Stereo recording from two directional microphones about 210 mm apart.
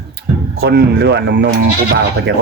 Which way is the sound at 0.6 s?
50° right (ahead or behind).